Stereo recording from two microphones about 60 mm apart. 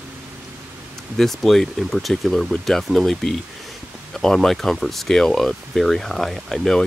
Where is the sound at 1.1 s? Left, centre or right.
Centre.